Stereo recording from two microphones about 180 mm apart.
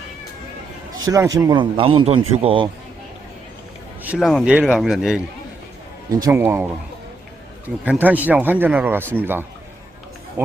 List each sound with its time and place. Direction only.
0.9 s speech: 20° right (ahead or behind)
4.0 s a man's voice: 5° right (ahead or behind)
6.1 s speech: 15° right (ahead or behind)
7.9 s speech: 10° right (ahead or behind)